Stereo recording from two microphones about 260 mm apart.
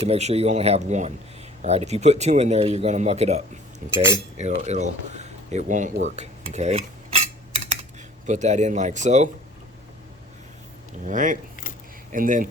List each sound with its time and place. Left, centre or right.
0.1 s speech: right
8.3 s speech: right
11.0 s speech: right